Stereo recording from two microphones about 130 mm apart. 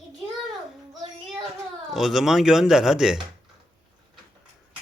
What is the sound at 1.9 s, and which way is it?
Speech, 5° right (ahead or behind).